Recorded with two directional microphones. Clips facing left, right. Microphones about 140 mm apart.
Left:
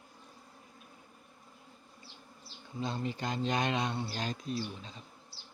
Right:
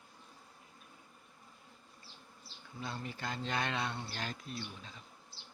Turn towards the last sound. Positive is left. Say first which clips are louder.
# left 6 dB
turn(degrees=20)  # may be behind; listen again after turning